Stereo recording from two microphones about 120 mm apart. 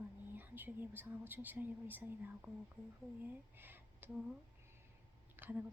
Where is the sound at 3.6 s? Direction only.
15° right (ahead or behind).